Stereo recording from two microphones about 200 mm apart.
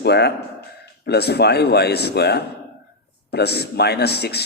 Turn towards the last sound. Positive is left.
turn(degrees=55)  # may be behind; listen again after turning